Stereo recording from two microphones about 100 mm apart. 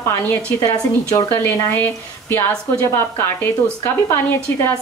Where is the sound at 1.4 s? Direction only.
20° left (ahead or behind).